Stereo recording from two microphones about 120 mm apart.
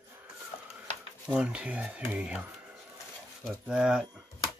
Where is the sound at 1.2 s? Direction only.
10° right (ahead or behind).